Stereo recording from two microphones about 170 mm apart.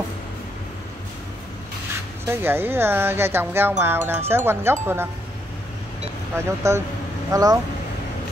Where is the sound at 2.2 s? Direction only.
15° right (ahead or behind).